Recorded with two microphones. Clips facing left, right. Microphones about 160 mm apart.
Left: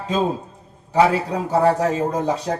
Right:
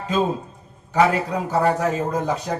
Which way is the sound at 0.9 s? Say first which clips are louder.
Left 1 dB; 30° left (ahead or behind).